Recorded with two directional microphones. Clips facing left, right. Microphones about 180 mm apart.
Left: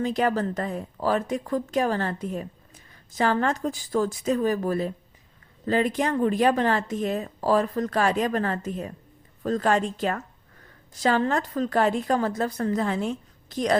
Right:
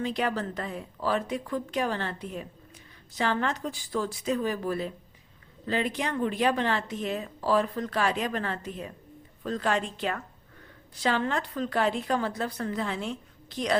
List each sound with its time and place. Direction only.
0.0 s speech: 45° left (ahead or behind)